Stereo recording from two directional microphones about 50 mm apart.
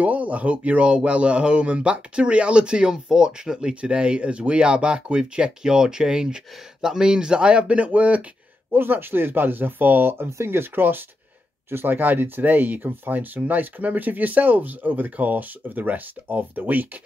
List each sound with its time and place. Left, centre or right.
0.0 s speech: right
8.7 s speech: right
10.3 s speech: right